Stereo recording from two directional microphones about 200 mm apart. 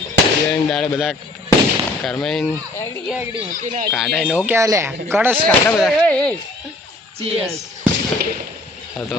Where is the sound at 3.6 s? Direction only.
35° right (ahead or behind).